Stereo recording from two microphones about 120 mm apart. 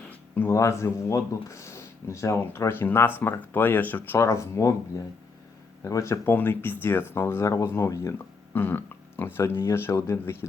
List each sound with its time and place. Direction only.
0.1 s a sound: 15° left (ahead or behind)
0.5 s speech: 25° left (ahead or behind)
5.8 s speech: 25° left (ahead or behind)